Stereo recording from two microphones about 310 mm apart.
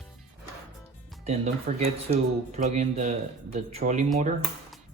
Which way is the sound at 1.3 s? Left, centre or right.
Right.